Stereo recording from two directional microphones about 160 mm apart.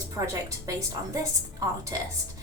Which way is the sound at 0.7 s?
20° right (ahead or behind).